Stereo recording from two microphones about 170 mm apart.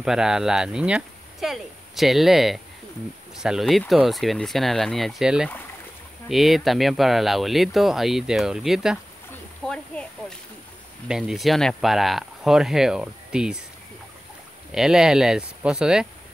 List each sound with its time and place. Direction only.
0.0 s speech: 5° right (ahead or behind)
9.9 s speech: 10° left (ahead or behind)
11.1 s speech: 5° right (ahead or behind)
14.7 s speech: 5° right (ahead or behind)